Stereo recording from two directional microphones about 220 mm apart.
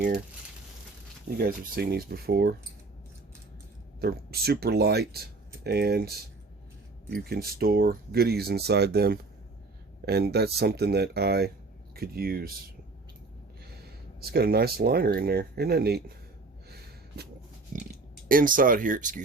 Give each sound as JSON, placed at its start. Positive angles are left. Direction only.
{"t": 1.4, "sound": "speech", "side_deg": -45}
{"t": 4.0, "sound": "speech", "side_deg": -45}
{"t": 14.2, "sound": "speech", "side_deg": -45}
{"t": 16.6, "sound": "gasp", "side_deg": -45}
{"t": 17.7, "sound": "speech", "side_deg": -35}